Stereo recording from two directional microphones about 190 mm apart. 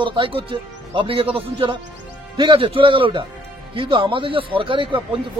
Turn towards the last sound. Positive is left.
turn(degrees=-25)  # may be behind; listen again after turning